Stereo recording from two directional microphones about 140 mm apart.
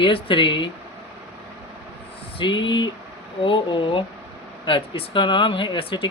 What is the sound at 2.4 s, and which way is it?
Speech, 35° left (ahead or behind).